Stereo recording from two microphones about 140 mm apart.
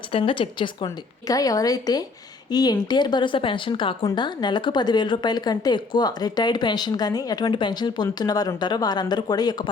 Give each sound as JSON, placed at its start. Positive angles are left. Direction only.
{"t": 0.1, "sound": "speech", "side_deg": 40}
{"t": 1.3, "sound": "speech", "side_deg": 25}